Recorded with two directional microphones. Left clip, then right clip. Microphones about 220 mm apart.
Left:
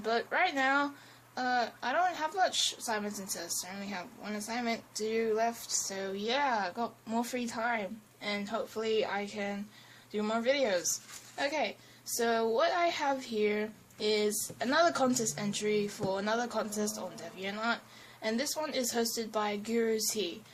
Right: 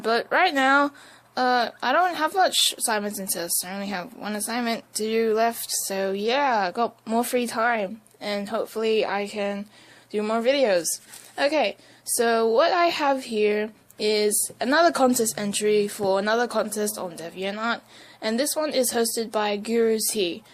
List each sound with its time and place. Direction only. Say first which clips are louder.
0.0 s speech: right 9 dB; 40° right (ahead or behind)